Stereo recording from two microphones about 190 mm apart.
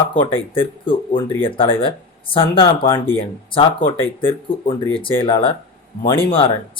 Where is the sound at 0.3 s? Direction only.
30° left (ahead or behind).